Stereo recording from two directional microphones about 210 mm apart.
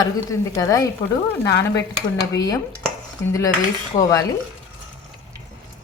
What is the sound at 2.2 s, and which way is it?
A woman's voice, 15° left (ahead or behind).